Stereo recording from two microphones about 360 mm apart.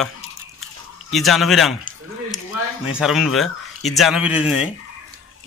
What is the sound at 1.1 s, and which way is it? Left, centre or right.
Speech, centre.